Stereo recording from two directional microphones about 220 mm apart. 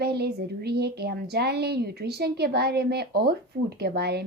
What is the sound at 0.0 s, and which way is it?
Speech, 45° right (ahead or behind).